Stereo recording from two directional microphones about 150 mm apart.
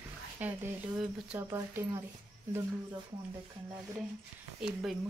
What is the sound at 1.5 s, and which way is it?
Speech, 20° right (ahead or behind).